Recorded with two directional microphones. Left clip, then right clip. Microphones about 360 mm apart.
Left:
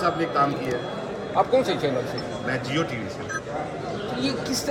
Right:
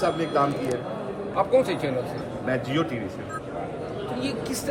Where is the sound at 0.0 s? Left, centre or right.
Right.